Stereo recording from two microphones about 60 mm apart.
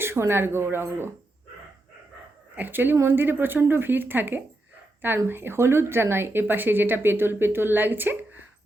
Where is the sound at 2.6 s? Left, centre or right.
Right.